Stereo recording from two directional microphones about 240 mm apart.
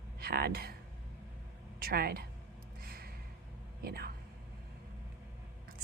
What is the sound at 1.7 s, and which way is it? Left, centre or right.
Speech, right.